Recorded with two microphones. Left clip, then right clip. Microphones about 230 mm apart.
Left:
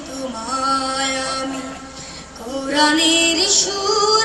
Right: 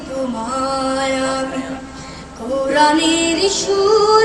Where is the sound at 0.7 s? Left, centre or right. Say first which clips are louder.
Right 2 dB; left.